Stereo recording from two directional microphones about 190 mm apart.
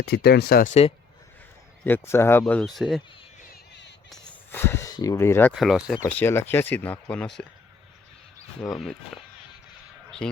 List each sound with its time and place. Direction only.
0.0 s speech: 60° left (ahead or behind)
0.7 s speech: 35° left (ahead or behind)
1.8 s speech: 10° left (ahead or behind)
2.4 s speech: 5° left (ahead or behind)
3.5 s a sound: 65° left (ahead or behind)
4.2 s speech: 10° left (ahead or behind)
5.5 s speech: centre (ahead or behind)
6.0 s speech: 10° left (ahead or behind)
8.6 s speech: 5° left (ahead or behind)